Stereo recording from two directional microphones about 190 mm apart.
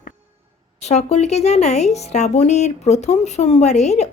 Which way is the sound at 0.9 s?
35° left (ahead or behind).